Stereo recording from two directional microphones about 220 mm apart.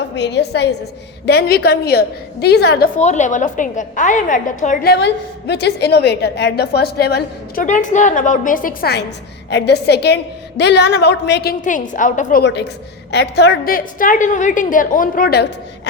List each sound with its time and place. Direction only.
0.2 s a woman's voice: 50° left (ahead or behind)
3.0 s a woman's voice: 30° left (ahead or behind)
12.4 s a woman's voice: 50° left (ahead or behind)